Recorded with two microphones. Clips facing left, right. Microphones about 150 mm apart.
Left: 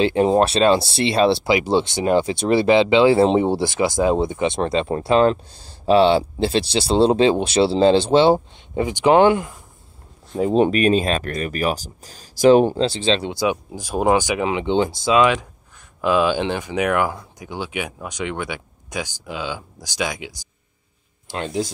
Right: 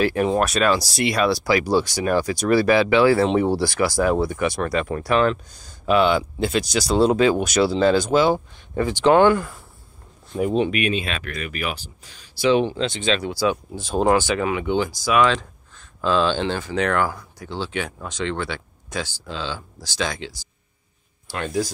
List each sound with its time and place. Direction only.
0.0 s speech: 25° left (ahead or behind)
10.6 s speech: 40° left (ahead or behind); by 15.3 s 20° left (ahead or behind)
16.0 s speech: 10° left (ahead or behind)